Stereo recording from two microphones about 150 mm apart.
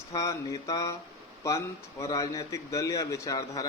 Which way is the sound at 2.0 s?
20° left (ahead or behind).